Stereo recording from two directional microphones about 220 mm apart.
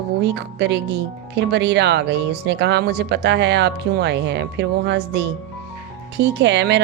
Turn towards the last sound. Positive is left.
turn(degrees=-55)  # may be behind; listen again after turning